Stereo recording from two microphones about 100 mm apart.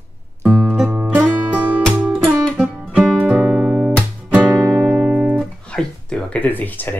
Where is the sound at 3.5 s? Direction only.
5° left (ahead or behind).